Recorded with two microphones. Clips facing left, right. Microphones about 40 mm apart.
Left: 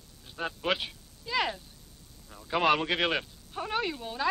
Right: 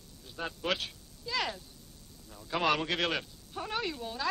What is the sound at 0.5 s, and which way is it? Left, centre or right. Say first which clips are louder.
Speech: left 3 dB; centre.